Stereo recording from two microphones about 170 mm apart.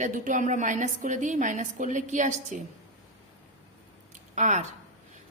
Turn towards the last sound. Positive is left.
turn(degrees=-45)  # may be behind; listen again after turning